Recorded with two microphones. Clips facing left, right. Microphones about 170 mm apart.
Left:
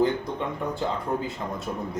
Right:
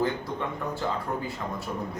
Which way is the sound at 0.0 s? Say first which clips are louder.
Left 4 dB; 20° left (ahead or behind).